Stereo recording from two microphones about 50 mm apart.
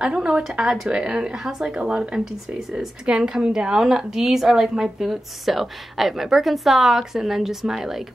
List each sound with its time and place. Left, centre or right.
0.0 s a woman's voice: centre